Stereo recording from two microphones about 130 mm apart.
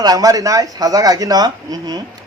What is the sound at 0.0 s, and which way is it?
Speech, 30° right (ahead or behind).